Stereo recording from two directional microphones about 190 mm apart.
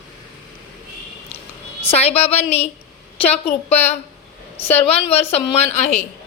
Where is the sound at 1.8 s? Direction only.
30° left (ahead or behind).